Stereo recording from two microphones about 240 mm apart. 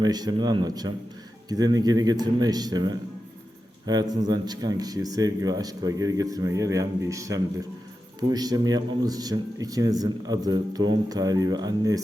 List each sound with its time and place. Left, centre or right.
0.0 s a man's voice: centre